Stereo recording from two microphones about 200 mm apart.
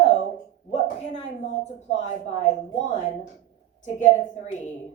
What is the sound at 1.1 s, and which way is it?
A woman's voice, 35° left (ahead or behind).